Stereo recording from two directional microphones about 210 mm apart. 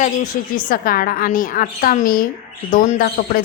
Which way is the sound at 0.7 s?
45° left (ahead or behind).